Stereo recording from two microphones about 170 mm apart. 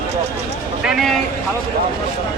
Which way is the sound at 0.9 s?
Centre (ahead or behind).